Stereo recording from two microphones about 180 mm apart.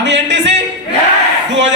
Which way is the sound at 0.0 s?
75° right (ahead or behind).